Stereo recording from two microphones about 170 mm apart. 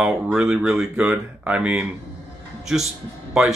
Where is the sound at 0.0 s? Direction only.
5° right (ahead or behind).